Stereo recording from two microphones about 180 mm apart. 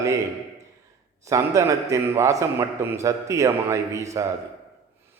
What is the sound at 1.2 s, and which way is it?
A man's voice, 15° right (ahead or behind).